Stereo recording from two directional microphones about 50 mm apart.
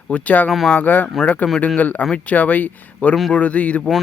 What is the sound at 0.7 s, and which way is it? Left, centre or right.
Speech, left.